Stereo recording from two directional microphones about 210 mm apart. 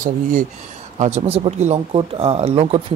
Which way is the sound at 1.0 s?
35° right (ahead or behind).